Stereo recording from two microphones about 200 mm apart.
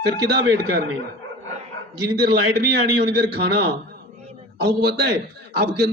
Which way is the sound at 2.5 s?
55° right (ahead or behind).